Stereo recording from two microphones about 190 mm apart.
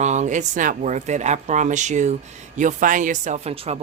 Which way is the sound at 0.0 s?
40° right (ahead or behind).